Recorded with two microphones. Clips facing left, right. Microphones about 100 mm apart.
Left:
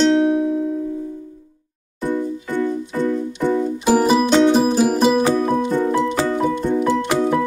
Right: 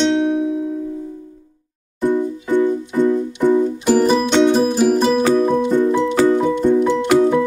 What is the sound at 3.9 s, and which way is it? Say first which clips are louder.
Music: left 1 dB; 10° left (ahead or behind).